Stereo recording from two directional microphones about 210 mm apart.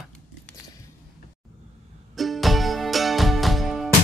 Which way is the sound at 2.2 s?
Centre (ahead or behind).